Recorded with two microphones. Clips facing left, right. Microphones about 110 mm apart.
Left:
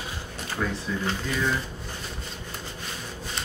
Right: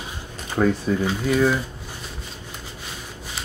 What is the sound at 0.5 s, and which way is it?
Speech, 45° right (ahead or behind).